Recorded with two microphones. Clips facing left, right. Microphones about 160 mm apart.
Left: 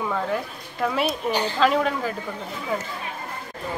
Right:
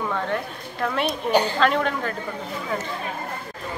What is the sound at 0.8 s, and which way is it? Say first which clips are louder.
Speech: left 1 dB; 5° left (ahead or behind).